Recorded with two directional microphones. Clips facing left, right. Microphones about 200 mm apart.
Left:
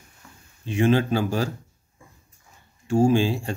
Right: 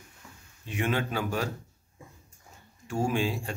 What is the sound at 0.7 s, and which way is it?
Speech, 30° left (ahead or behind).